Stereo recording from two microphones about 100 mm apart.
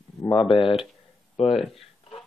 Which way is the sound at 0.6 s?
60° left (ahead or behind).